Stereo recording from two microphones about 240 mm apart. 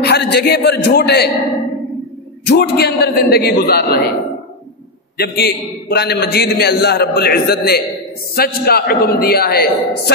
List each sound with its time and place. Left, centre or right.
0.0 s a man's voice: left
2.4 s a man's voice: left
5.1 s a man's voice: left